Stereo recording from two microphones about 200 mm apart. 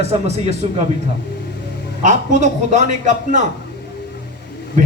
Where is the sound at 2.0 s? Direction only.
40° right (ahead or behind).